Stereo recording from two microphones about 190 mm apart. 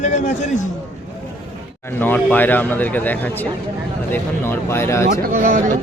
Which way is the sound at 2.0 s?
10° left (ahead or behind).